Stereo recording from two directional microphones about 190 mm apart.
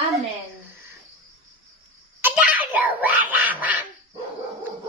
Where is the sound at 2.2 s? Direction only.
5° right (ahead or behind).